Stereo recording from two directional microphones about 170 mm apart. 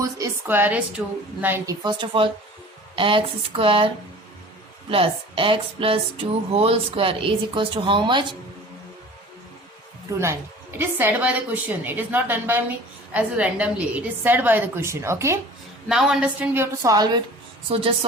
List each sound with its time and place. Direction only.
0.0 s a woman's voice: 15° right (ahead or behind)
1.8 s a woman's voice: 25° right (ahead or behind)
4.9 s a woman's voice: 30° right (ahead or behind)
10.2 s a woman's voice: 15° right (ahead or behind)
15.9 s a woman's voice: 5° right (ahead or behind); by 17.2 s 20° right (ahead or behind)
17.7 s a woman's voice: 30° right (ahead or behind)